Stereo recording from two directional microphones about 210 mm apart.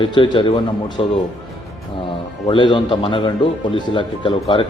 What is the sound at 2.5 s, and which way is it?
Speech, 25° left (ahead or behind).